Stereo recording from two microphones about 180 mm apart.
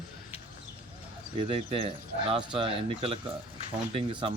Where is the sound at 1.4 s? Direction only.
30° right (ahead or behind).